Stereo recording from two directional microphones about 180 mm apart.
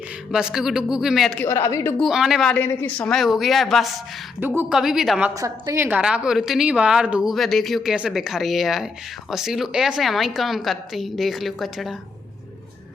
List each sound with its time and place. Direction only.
0.3 s a woman's voice: 5° right (ahead or behind)
1.5 s a woman's voice: 15° left (ahead or behind)
2.0 s a woman's voice: centre (ahead or behind)
3.2 s a woman's voice: centre (ahead or behind)
4.4 s a woman's voice: 10° right (ahead or behind)
5.3 s a woman's voice: 20° right (ahead or behind); by 11.9 s centre (ahead or behind)